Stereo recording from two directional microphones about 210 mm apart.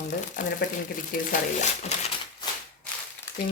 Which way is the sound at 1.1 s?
40° left (ahead or behind).